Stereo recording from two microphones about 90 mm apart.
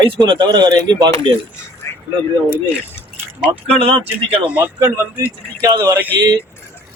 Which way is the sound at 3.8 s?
90° right.